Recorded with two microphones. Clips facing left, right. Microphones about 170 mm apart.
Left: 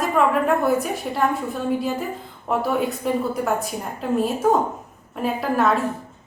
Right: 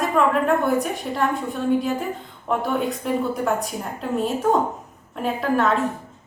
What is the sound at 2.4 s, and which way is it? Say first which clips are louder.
Speech: left 1 dB; 5° left (ahead or behind).